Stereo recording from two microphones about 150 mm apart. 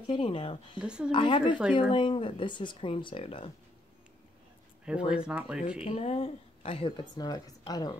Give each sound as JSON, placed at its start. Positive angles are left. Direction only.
{"t": 0.0, "sound": "a woman's voice", "side_deg": 35}
{"t": 0.7, "sound": "speech", "side_deg": -5}
{"t": 1.1, "sound": "a woman's voice", "side_deg": 35}
{"t": 4.8, "sound": "speech", "side_deg": -5}
{"t": 5.9, "sound": "a woman's voice", "side_deg": 40}